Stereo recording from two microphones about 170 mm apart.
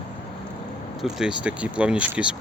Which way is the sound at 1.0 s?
5° right (ahead or behind).